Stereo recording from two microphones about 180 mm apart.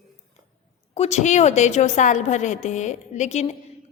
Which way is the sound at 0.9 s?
35° left (ahead or behind).